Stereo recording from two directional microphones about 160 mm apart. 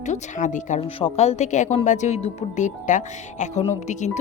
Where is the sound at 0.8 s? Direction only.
35° left (ahead or behind).